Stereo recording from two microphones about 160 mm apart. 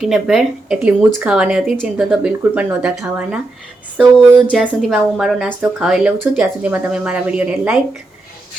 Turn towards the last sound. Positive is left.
turn(degrees=-10)  # may be behind; listen again after turning